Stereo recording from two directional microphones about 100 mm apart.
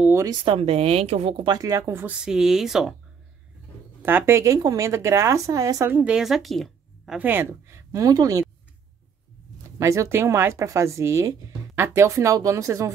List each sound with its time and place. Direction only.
0.3 s speech: 50° right (ahead or behind)
0.6 s speech: 80° right
1.6 s speech: 35° right (ahead or behind)
2.1 s speech: 5° right (ahead or behind)
4.0 s speech: 25° right (ahead or behind)
5.9 s a woman's voice: 20° right (ahead or behind)
6.1 s speech: 5° right (ahead or behind)
7.2 s speech: 20° right (ahead or behind); by 8.5 s 35° right (ahead or behind)
9.8 s speech: 30° right (ahead or behind)